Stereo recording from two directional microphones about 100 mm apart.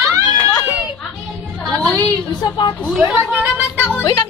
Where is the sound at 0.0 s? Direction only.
30° right (ahead or behind).